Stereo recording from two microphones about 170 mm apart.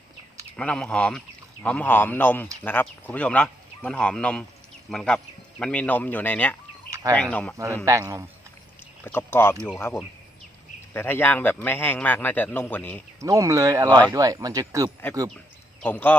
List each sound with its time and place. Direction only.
0.5 s a man's voice: 5° left (ahead or behind)
6.9 s chicken: 20° right (ahead or behind)
7.2 s a man's voice: 5° left (ahead or behind)
7.5 s speech: 15° right (ahead or behind)
9.0 s a man's voice: 15° left (ahead or behind)
13.1 s speech: 20° right (ahead or behind)
15.8 s a man's voice: 10° left (ahead or behind)